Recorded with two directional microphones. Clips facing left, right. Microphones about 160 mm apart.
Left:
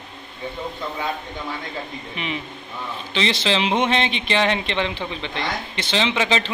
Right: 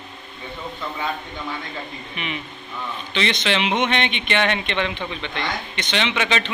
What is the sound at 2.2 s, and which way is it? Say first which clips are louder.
A man's voice: left 2 dB; 30° left (ahead or behind).